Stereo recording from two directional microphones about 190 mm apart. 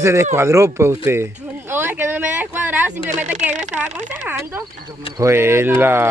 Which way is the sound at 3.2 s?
40° right (ahead or behind).